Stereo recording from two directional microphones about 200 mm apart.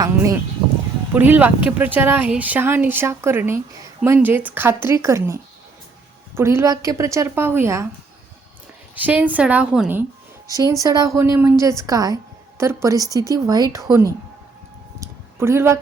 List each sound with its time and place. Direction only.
0.0 s speech: 15° right (ahead or behind)
9.0 s speech: 10° right (ahead or behind)
10.4 s a woman's voice: 15° right (ahead or behind)
15.0 s a sound: 10° right (ahead or behind)